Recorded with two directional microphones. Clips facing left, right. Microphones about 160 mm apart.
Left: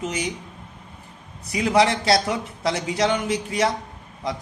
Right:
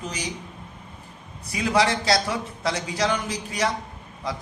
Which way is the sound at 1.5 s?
25° left (ahead or behind).